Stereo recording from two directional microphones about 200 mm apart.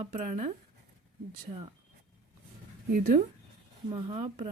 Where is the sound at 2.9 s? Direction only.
45° right (ahead or behind).